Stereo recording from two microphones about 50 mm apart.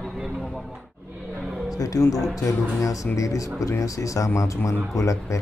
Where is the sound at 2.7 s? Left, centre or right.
Left.